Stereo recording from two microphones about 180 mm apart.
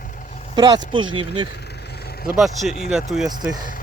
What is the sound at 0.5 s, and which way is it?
Speech, 25° right (ahead or behind).